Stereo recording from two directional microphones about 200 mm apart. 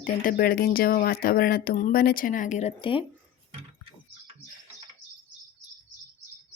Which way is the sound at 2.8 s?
25° left (ahead or behind).